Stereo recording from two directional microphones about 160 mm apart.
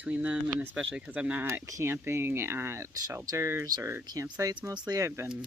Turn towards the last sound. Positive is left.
turn(degrees=-20)  # may be behind; listen again after turning